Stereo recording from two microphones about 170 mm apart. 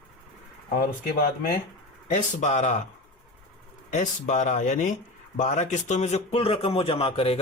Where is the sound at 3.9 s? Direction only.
45° left (ahead or behind).